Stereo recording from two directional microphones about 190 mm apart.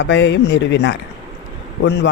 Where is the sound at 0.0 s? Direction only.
65° left (ahead or behind).